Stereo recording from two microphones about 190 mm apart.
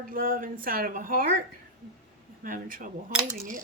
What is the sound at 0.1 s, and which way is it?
Speech, 45° right (ahead or behind).